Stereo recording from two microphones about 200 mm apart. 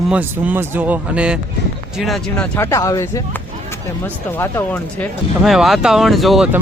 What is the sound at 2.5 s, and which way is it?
Speech, 15° left (ahead or behind).